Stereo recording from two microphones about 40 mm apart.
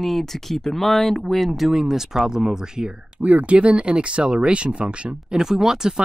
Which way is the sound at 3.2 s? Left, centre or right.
Right.